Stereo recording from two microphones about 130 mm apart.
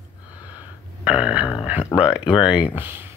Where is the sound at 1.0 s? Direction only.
10° right (ahead or behind).